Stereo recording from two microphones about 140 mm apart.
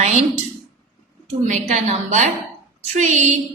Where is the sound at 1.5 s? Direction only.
55° right (ahead or behind).